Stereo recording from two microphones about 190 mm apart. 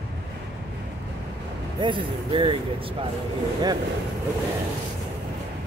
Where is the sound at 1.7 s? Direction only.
25° right (ahead or behind).